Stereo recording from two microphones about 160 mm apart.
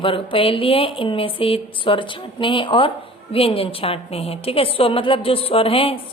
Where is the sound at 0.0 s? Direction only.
35° left (ahead or behind).